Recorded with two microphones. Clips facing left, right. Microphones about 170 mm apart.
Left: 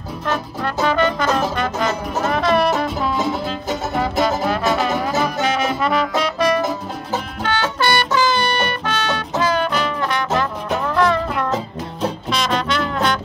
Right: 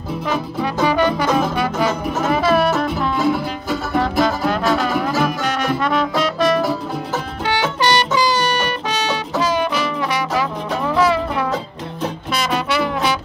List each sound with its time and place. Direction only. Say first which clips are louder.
0.8 s music: right 1 dB; 10° right (ahead or behind)
7.4 s music: right 2 dB; 15° right (ahead or behind)